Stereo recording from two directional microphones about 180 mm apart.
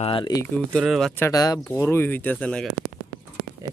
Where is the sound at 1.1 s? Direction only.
15° left (ahead or behind).